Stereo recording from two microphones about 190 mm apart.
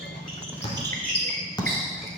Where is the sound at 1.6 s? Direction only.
20° left (ahead or behind).